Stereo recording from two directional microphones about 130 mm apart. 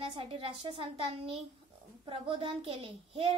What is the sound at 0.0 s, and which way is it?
A child's voice, 45° right (ahead or behind).